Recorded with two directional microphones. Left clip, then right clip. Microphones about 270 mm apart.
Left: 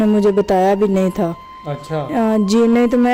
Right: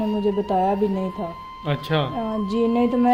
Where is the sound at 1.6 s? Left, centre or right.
Centre.